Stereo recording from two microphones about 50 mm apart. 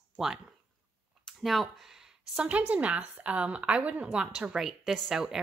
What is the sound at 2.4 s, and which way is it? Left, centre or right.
A woman's voice, right.